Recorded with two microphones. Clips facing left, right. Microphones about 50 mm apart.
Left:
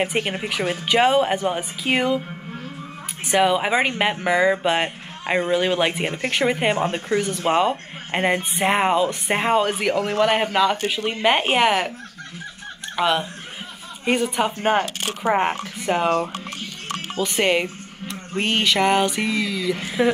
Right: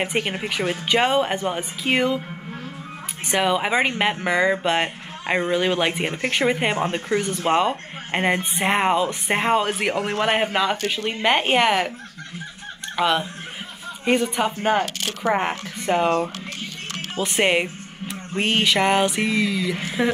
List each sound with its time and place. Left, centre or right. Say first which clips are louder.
0.0 s speech: left 1 dB; centre
3.3 s speech: left 2 dB; centre
9.8 s speech: left 2 dB; centre
11.2 s speech: even; centre
12.9 s speech: even; centre
14.6 s speech: left 1 dB; left
15.0 s speech: left 3 dB; centre
17.2 s speech: even; centre